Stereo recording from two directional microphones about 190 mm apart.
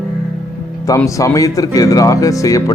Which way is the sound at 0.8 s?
15° left (ahead or behind).